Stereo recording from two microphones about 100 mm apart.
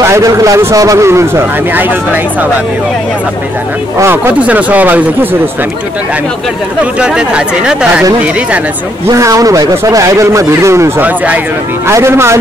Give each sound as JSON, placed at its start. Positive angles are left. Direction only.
{"t": 0.0, "sound": "a man's voice", "side_deg": -30}
{"t": 4.0, "sound": "a man's voice", "side_deg": -25}
{"t": 4.3, "sound": "speech", "side_deg": -15}
{"t": 6.8, "sound": "speech", "side_deg": -10}
{"t": 9.0, "sound": "speech", "side_deg": -35}
{"t": 11.0, "sound": "speech", "side_deg": -15}
{"t": 11.9, "sound": "a man's voice", "side_deg": -25}